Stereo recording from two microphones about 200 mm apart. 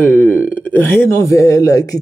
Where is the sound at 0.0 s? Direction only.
10° left (ahead or behind).